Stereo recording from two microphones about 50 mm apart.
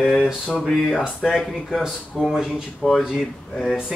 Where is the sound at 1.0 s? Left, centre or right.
Centre.